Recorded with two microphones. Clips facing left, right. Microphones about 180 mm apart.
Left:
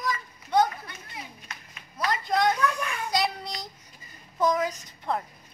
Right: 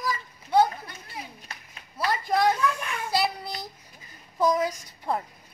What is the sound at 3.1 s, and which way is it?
Child singing, 5° right (ahead or behind).